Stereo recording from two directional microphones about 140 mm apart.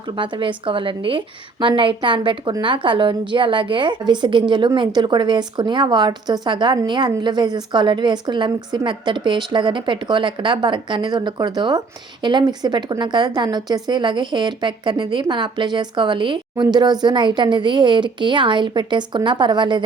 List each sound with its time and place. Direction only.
0.2 s a woman's voice: 35° right (ahead or behind)